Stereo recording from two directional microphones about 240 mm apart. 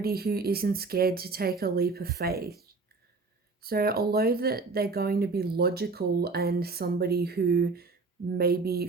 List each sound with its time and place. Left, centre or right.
0.0 s speech: right